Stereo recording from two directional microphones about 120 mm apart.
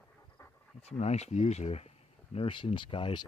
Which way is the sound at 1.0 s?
65° left (ahead or behind).